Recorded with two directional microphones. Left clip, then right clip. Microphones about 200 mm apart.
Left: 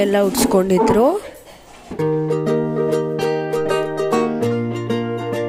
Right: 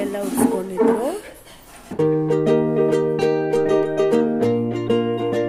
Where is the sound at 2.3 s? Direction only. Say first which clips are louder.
Right 2 dB; centre (ahead or behind).